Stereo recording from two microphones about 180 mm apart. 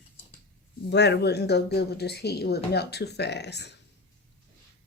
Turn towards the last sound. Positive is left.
turn(degrees=70)  # may be behind; listen again after turning